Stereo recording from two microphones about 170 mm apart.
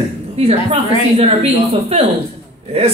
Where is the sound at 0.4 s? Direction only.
35° right (ahead or behind).